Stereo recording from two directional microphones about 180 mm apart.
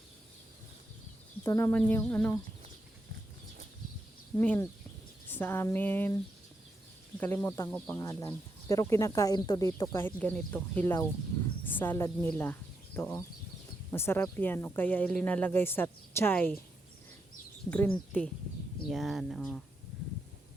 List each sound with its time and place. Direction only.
1.5 s speech: 15° left (ahead or behind)
4.4 s speech: 10° left (ahead or behind)
7.2 s speech: 10° left (ahead or behind)
17.7 s speech: 10° left (ahead or behind)